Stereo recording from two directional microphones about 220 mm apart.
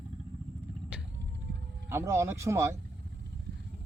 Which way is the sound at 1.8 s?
10° right (ahead or behind).